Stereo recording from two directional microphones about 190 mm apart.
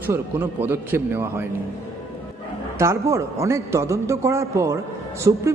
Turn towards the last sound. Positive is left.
turn(degrees=-20)  # may be behind; listen again after turning